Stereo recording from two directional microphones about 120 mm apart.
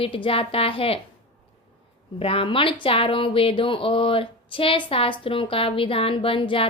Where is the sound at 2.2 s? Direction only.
50° left (ahead or behind).